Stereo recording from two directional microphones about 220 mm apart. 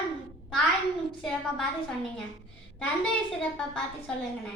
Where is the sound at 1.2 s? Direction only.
Centre (ahead or behind).